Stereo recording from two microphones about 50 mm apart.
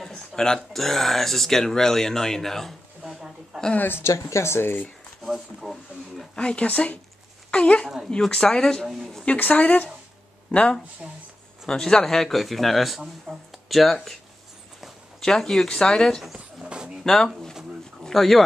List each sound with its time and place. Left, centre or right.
0.0 s speech: centre
3.0 s speech: centre
3.7 s speech: left
4.0 s speech: left
5.6 s speech: centre
6.3 s speech: centre
6.7 s speech: left
7.5 s speech: centre
9.4 s speech: left
10.5 s speech: left
11.6 s speech: centre
15.2 s speech: centre
16.6 s a sound: centre
17.0 s speech: centre